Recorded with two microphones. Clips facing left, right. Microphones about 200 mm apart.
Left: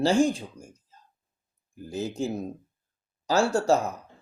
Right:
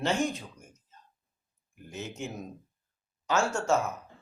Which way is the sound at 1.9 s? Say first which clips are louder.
Left 8 dB; 35° left (ahead or behind).